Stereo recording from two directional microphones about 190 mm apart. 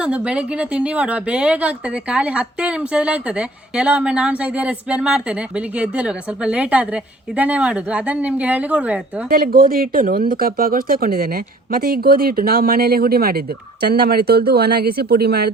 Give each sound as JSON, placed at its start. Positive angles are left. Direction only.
{"t": 0.0, "sound": "speech", "side_deg": -5}
{"t": 9.3, "sound": "speech", "side_deg": -50}